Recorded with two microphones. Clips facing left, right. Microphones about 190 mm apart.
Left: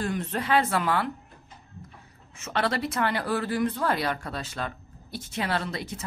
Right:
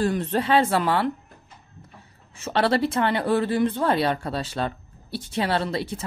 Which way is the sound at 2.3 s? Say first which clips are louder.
Right 6 dB; 30° right (ahead or behind).